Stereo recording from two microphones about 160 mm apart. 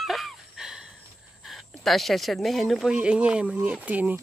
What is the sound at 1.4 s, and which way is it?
Speech, centre (ahead or behind).